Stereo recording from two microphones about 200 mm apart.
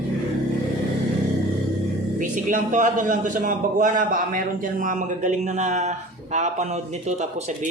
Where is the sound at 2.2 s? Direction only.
40° right (ahead or behind).